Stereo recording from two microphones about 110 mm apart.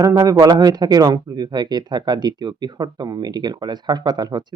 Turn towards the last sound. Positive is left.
turn(degrees=-40)  # may be behind; listen again after turning